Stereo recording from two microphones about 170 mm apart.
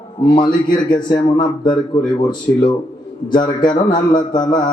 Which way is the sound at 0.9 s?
25° left (ahead or behind).